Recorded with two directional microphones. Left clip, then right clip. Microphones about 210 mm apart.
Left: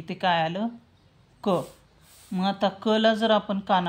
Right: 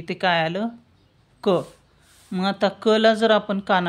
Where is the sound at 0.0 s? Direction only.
30° right (ahead or behind).